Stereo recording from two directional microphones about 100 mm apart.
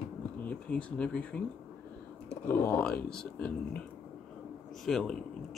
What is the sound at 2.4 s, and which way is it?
Speech, 25° left (ahead or behind).